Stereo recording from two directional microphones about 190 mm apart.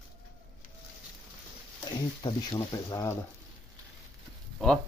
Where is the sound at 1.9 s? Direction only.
20° left (ahead or behind).